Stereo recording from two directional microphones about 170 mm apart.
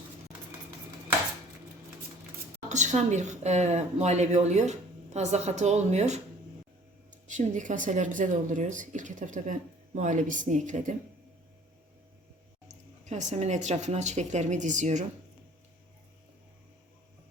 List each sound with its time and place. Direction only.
2.6 s a woman's voice: 45° right (ahead or behind)
12.6 s speech: 45° right (ahead or behind)